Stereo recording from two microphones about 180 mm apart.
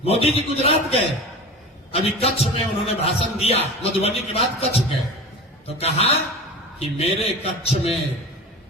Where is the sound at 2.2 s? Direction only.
35° left (ahead or behind).